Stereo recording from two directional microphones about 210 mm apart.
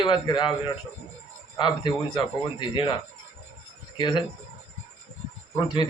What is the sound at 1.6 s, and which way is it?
A man's voice, 20° left (ahead or behind).